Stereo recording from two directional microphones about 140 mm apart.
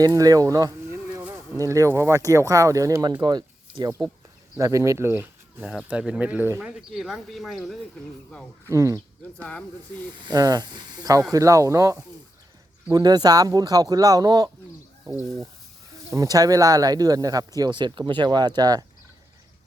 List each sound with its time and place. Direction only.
0.0 s speech: 25° right (ahead or behind)
5.6 s speech: 5° right (ahead or behind)
8.7 s speech: 20° right (ahead or behind)
9.4 s speech: 10° left (ahead or behind)
10.2 s speech: 30° right (ahead or behind)